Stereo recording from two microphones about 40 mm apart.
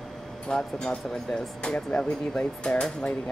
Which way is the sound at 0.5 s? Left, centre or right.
Centre.